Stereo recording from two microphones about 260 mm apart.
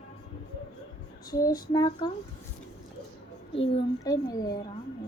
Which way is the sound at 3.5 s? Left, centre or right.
Centre.